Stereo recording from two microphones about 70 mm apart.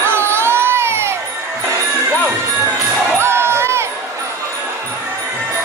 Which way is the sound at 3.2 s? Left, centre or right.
Right.